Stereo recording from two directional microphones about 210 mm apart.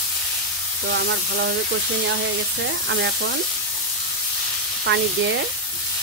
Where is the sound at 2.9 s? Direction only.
60° right (ahead or behind).